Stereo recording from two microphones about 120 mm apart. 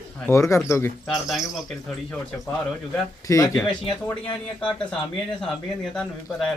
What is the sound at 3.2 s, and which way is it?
Speech, 25° left (ahead or behind).